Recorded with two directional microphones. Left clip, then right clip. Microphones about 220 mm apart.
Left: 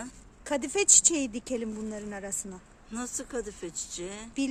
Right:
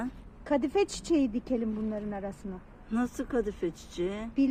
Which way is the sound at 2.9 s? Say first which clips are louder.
Right 4 dB; 20° right (ahead or behind).